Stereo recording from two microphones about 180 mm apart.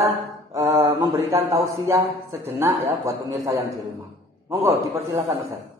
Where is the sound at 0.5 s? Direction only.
15° right (ahead or behind).